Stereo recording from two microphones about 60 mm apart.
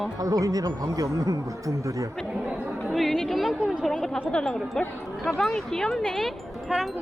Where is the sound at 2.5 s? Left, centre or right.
Centre.